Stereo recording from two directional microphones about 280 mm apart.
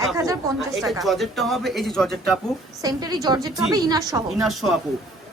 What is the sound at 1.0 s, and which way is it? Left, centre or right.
Speech, centre.